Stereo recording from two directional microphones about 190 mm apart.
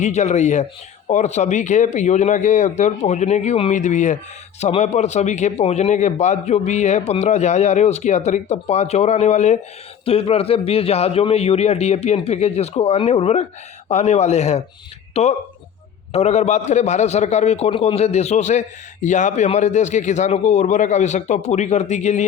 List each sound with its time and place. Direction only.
0.0 s a man's voice: 35° left (ahead or behind)